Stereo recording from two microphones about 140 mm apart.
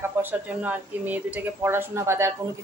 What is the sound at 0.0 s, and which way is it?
A woman's voice, 15° right (ahead or behind).